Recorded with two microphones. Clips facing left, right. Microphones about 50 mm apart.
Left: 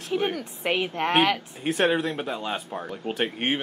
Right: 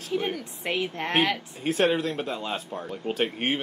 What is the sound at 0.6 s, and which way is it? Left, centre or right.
Speech, left.